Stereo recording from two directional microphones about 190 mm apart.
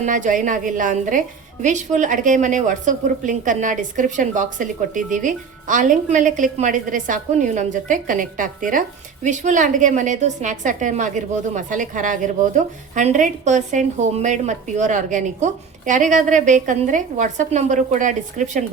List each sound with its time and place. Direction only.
0.0 s a woman's voice: 40° right (ahead or behind)